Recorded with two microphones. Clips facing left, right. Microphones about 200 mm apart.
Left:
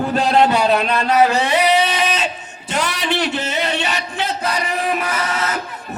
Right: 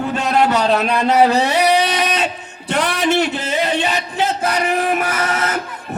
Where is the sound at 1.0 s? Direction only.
25° right (ahead or behind).